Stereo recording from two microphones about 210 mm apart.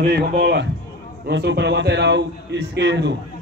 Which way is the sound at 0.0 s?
50° right (ahead or behind).